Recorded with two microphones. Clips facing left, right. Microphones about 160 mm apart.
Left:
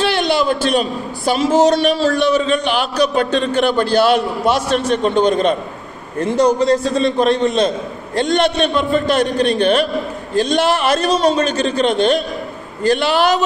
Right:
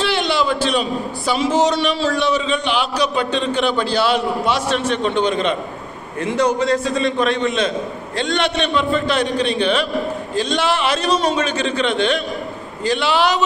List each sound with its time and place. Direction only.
0.0 s a man's voice: 45° left (ahead or behind)